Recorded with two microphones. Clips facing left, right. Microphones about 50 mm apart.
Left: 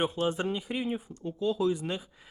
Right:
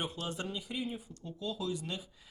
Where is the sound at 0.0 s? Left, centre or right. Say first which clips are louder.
Left 9 dB; left.